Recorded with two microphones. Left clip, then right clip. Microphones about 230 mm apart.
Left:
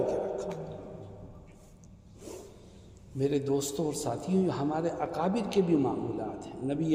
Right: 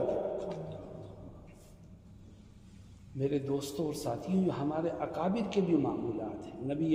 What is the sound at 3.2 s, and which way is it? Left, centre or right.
A man's voice, left.